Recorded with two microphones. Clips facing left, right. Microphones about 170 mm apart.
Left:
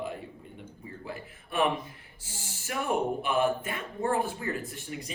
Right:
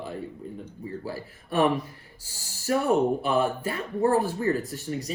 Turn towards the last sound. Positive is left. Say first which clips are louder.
# right 7 dB
turn(degrees=-40)  # may be behind; listen again after turning